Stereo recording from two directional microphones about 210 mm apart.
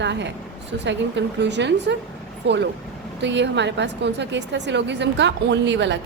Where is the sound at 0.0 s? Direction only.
55° right (ahead or behind).